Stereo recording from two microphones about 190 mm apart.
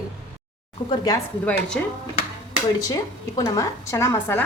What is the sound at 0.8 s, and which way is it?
Speech, 20° left (ahead or behind).